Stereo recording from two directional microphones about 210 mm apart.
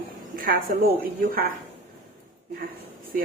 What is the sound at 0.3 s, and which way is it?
Speech, 45° right (ahead or behind).